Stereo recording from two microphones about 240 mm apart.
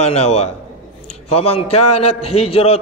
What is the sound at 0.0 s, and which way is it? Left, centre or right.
A man's voice, left.